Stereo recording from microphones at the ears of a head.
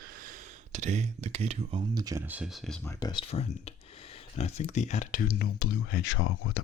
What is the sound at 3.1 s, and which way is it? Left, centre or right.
Speech, left.